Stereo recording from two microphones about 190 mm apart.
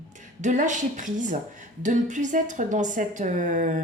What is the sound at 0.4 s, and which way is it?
A woman's voice, 40° right (ahead or behind).